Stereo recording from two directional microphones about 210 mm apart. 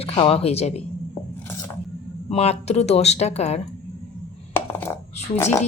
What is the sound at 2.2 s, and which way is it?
Speech, 30° left (ahead or behind).